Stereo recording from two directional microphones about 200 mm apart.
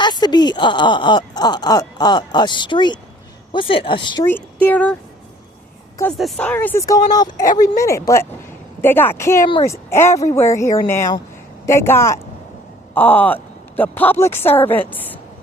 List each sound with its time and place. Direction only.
0.0 s speech: 20° left (ahead or behind)
4.6 s speech: 5° left (ahead or behind)
6.1 s speech: centre (ahead or behind)